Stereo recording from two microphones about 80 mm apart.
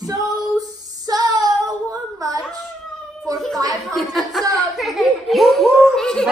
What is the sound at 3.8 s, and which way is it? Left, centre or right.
Speech, centre.